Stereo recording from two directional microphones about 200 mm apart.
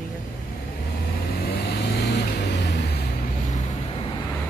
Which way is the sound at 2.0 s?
60° left (ahead or behind).